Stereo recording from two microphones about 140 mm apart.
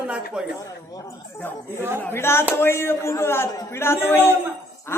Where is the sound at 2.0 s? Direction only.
15° left (ahead or behind).